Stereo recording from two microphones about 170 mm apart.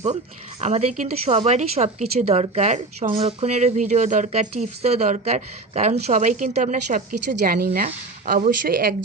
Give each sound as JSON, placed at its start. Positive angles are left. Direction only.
{"t": 0.6, "sound": "speech", "side_deg": -45}